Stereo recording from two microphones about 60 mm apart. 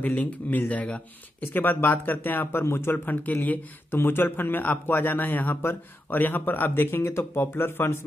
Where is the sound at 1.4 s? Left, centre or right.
Left.